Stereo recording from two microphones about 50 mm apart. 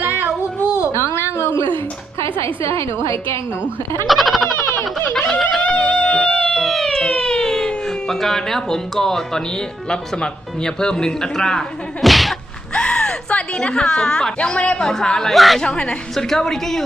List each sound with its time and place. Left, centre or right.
0.0 s a sound: right
1.1 s a sound: left
2.2 s a woman's voice: left
4.0 s a woman's voice: centre
4.5 s a sound: left
5.3 s a woman's voice: centre
5.6 s music: left
6.5 s speech: centre
12.0 s whip: centre
12.7 s a woman's voice: centre
15.3 s a woman's voice: centre
15.6 s speech: centre
16.1 s a woman's voice: centre